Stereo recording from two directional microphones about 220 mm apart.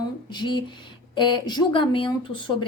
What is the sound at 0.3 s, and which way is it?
Speech, 20° left (ahead or behind).